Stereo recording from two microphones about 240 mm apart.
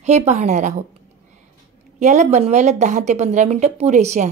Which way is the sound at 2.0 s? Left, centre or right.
Right.